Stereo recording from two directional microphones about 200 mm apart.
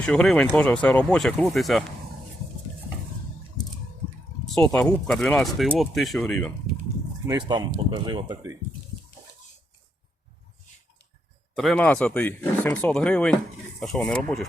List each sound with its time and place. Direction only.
0.0 s speech: 5° left (ahead or behind)
4.5 s speech: 5° left (ahead or behind)
7.3 s speech: 20° right (ahead or behind)
11.5 s speech: centre (ahead or behind)